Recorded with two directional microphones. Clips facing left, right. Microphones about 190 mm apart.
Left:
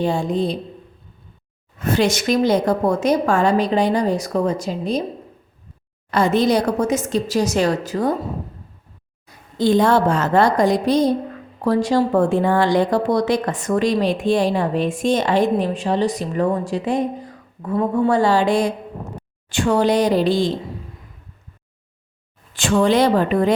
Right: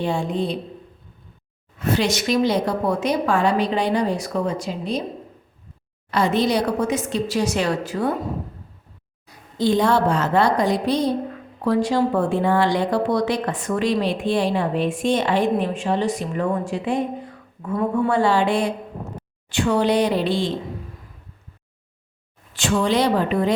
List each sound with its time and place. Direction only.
0.0 s speech: 40° left (ahead or behind)
1.8 s a woman's voice: 50° left (ahead or behind)
6.1 s a woman's voice: 50° left (ahead or behind)
9.6 s a woman's voice: 50° left (ahead or behind)
22.5 s a woman's voice: 50° left (ahead or behind)